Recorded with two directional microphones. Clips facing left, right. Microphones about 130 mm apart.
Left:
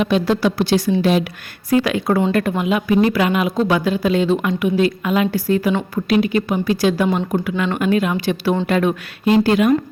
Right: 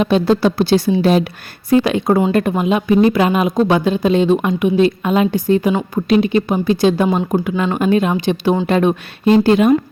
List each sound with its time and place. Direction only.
0.0 s a woman's voice: 30° right (ahead or behind)
1.7 s a woman's voice: 25° right (ahead or behind)
7.5 s a woman's voice: 35° right (ahead or behind)